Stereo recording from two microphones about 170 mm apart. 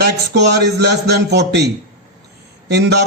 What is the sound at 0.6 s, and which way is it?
A man's voice, 75° right (ahead or behind).